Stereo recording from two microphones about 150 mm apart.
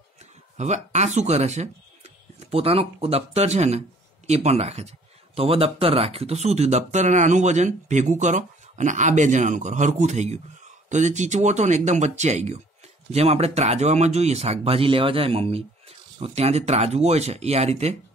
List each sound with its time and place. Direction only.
0.6 s speech: 50° right (ahead or behind)